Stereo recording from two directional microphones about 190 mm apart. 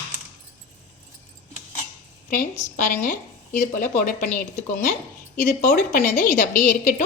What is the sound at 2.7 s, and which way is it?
A woman's voice, 45° left (ahead or behind).